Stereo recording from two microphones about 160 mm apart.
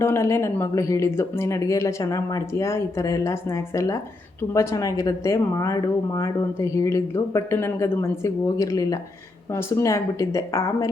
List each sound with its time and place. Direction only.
0.0 s speech: 15° left (ahead or behind)
4.5 s speech: 20° left (ahead or behind)